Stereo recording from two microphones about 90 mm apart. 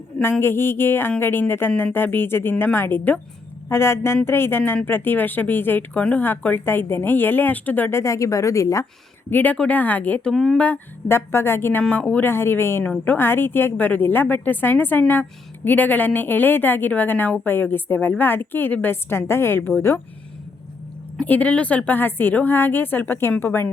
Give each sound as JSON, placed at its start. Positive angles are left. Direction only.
{"t": 0.2, "sound": "a woman's voice", "side_deg": 25}
{"t": 9.3, "sound": "a woman's voice", "side_deg": 20}
{"t": 10.3, "sound": "speech", "side_deg": 0}
{"t": 11.1, "sound": "a woman's voice", "side_deg": 25}
{"t": 11.8, "sound": "a woman's voice", "side_deg": 15}
{"t": 21.2, "sound": "a woman's voice", "side_deg": 15}